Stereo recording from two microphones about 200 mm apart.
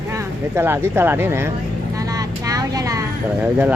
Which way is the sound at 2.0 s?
15° right (ahead or behind).